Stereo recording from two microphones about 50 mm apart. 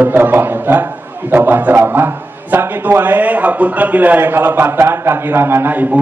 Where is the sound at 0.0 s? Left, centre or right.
Right.